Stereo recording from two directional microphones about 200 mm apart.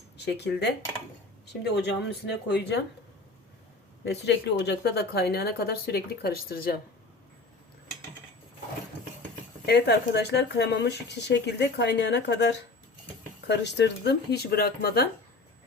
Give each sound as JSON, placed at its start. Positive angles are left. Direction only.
{"t": 0.3, "sound": "speech", "side_deg": 55}
{"t": 4.0, "sound": "a woman's voice", "side_deg": 60}
{"t": 9.6, "sound": "speech", "side_deg": 55}